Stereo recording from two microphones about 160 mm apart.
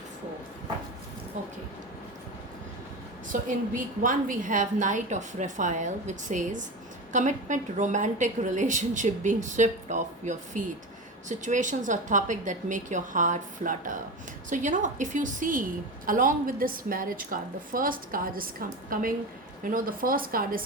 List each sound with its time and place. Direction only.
3.3 s a woman's voice: 55° right (ahead or behind)